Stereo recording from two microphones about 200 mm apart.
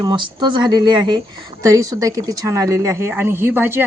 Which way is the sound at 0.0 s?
20° right (ahead or behind).